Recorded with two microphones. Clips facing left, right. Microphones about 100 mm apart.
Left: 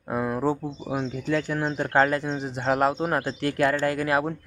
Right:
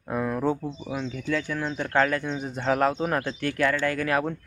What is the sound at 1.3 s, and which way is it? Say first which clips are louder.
Speech: left 2 dB; 35° left (ahead or behind).